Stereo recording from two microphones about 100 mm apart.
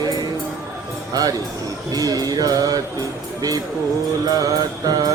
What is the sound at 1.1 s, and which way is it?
Speech, 40° right (ahead or behind).